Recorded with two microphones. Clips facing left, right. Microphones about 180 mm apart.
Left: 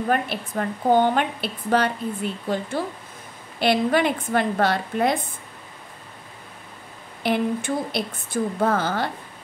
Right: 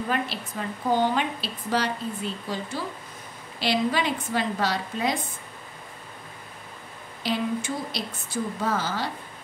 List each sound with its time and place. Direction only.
0.1 s a woman's voice: 55° left (ahead or behind)
7.2 s a woman's voice: 55° left (ahead or behind)